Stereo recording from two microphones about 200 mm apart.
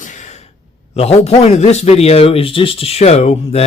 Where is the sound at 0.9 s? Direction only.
30° left (ahead or behind).